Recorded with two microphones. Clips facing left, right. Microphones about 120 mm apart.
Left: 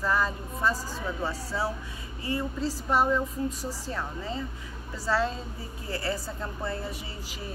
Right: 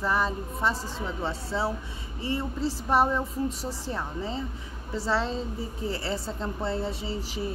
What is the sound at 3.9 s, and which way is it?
Speech, 25° right (ahead or behind).